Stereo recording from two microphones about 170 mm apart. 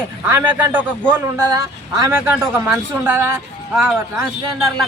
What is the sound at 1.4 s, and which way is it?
A man's voice, 20° right (ahead or behind).